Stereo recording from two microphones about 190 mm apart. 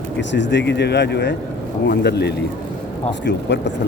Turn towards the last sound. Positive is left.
turn(degrees=65)  # may be behind; listen again after turning